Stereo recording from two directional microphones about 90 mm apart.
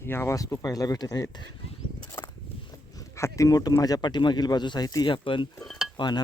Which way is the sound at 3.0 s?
35° left (ahead or behind).